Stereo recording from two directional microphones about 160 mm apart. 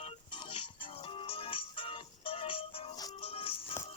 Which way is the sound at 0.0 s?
30° left (ahead or behind).